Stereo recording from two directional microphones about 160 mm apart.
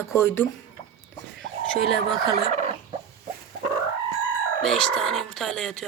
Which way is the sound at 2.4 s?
45° right (ahead or behind).